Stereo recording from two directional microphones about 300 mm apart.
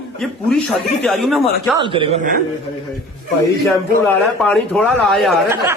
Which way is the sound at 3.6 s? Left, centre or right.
Centre.